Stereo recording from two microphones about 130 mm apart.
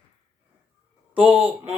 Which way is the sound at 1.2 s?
15° right (ahead or behind).